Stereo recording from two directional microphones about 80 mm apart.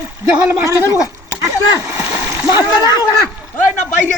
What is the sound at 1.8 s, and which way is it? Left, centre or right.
Splash, right.